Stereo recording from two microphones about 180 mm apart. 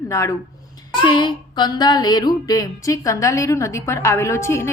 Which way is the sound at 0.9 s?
25° left (ahead or behind).